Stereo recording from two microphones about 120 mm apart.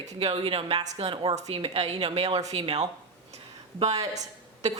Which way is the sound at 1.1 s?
40° right (ahead or behind).